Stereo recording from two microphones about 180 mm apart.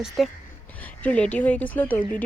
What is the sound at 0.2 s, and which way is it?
Speech, centre (ahead or behind).